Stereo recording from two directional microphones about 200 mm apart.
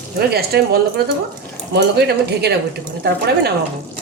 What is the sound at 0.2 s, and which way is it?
Speech, 50° right (ahead or behind).